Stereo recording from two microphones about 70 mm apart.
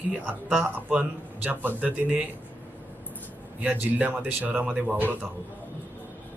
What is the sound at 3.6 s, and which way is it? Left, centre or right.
A man's voice, right.